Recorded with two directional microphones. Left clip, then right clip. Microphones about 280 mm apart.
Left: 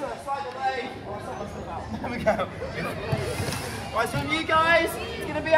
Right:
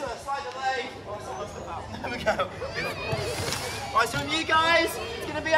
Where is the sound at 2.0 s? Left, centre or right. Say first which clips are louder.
Left 2 dB; centre.